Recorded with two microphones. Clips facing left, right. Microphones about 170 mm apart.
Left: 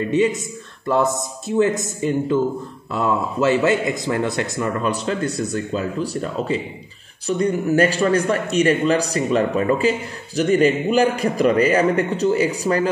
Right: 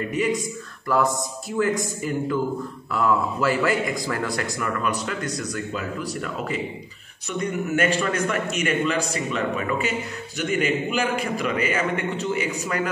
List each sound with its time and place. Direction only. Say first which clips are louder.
0.1 s a man's voice: left 6 dB; 25° left (ahead or behind)